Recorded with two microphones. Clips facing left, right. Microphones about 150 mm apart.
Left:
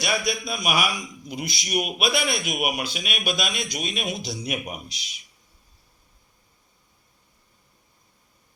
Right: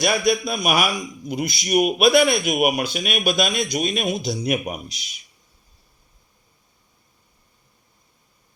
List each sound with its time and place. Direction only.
0.0 s a man's voice: 50° right (ahead or behind)